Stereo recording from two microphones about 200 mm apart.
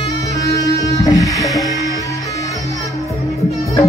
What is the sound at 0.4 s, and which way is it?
Music, 15° left (ahead or behind).